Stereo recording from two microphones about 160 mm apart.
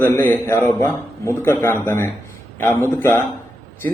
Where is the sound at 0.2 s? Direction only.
15° left (ahead or behind).